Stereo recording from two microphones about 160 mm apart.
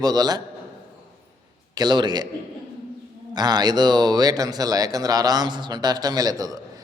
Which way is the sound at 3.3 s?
25° right (ahead or behind).